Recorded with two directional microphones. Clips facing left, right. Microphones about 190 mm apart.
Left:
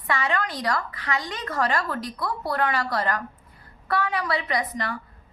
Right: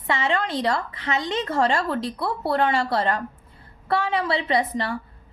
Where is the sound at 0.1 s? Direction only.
25° right (ahead or behind).